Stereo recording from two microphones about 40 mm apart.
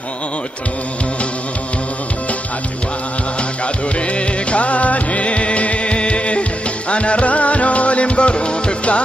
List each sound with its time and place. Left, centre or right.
3.6 s music: left